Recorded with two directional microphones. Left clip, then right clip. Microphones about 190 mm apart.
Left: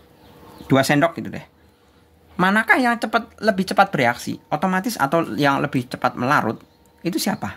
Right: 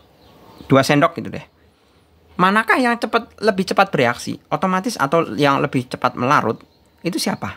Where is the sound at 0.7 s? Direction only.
25° right (ahead or behind).